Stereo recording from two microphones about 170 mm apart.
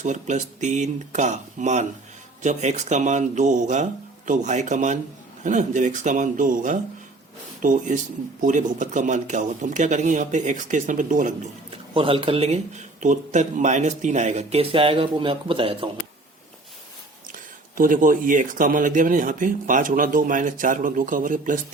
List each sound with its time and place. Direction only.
0.0 s speech: 45° right (ahead or behind)
11.9 s speech: 30° right (ahead or behind)
17.3 s speech: 55° right (ahead or behind)